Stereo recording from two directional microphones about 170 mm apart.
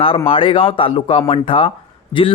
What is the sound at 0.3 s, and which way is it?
A man's voice, 30° left (ahead or behind).